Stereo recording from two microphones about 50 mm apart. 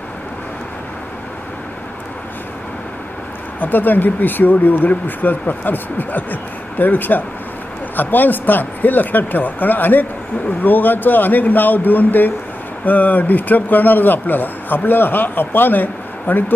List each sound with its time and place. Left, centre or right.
3.6 s speech: left